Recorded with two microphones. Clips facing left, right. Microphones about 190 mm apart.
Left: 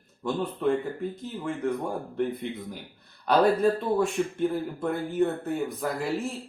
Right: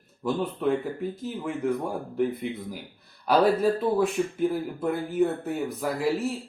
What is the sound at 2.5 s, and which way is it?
Speech, 5° right (ahead or behind).